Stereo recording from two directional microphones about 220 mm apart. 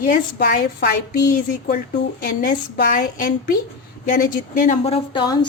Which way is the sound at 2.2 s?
40° left (ahead or behind).